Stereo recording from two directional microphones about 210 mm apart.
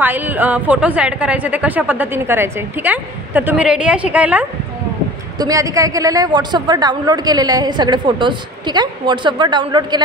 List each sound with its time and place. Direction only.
0.0 s a woman's voice: 10° right (ahead or behind)